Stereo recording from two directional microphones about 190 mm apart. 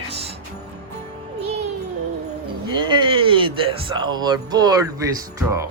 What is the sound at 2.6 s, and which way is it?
Speech, 25° right (ahead or behind).